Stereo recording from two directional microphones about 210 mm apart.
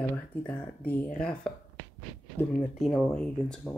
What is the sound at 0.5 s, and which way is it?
Speech, 5° left (ahead or behind).